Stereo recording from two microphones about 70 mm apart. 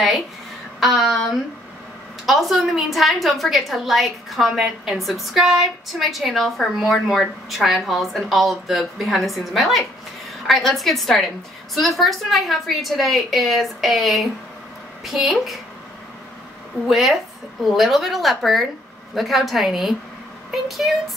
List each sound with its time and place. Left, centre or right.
0.7 s a woman's voice: centre
16.8 s a woman's voice: centre